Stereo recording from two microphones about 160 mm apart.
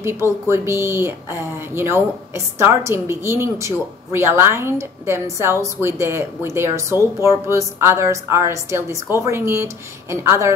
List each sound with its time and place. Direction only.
0.0 s a woman's voice: 15° right (ahead or behind)